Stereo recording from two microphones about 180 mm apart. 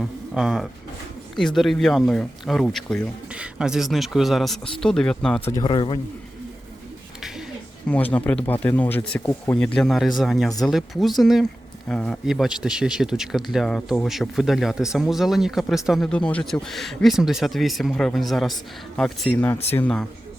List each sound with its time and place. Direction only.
0.0 s speech: centre (ahead or behind)
5.5 s speech: 30° left (ahead or behind)
7.2 s a sound: centre (ahead or behind)
7.9 s speech: 5° left (ahead or behind)